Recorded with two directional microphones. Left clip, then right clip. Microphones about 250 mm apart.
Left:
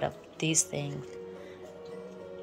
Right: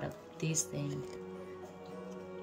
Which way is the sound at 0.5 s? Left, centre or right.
Left.